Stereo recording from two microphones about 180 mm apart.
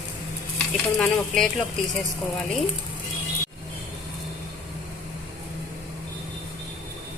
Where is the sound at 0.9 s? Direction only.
5° left (ahead or behind).